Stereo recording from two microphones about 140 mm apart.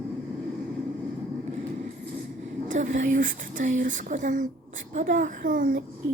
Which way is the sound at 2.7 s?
65° right (ahead or behind).